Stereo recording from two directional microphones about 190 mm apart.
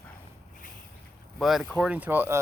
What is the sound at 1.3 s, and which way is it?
Speech, centre (ahead or behind).